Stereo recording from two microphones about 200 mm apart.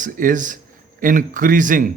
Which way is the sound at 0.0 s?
40° right (ahead or behind).